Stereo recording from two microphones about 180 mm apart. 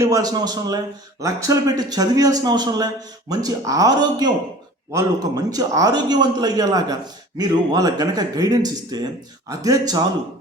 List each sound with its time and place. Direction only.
0.0 s a man's voice: 20° right (ahead or behind)
5.5 s a man's voice: 20° right (ahead or behind)